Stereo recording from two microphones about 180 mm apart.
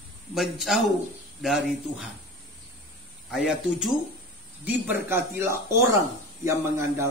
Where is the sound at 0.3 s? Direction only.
Centre (ahead or behind).